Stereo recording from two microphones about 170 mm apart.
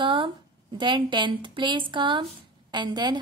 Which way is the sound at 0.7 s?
30° right (ahead or behind).